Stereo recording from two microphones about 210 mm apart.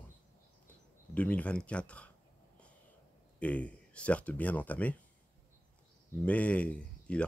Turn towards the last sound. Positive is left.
turn(degrees=5)  # may be behind; listen again after turning